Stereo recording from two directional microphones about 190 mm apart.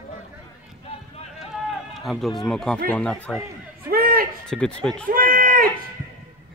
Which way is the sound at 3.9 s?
50° right (ahead or behind).